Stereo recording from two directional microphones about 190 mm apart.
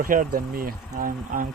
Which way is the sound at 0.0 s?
45° right (ahead or behind).